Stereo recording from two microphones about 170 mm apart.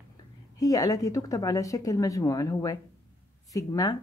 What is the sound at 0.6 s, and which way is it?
Speech, 20° left (ahead or behind).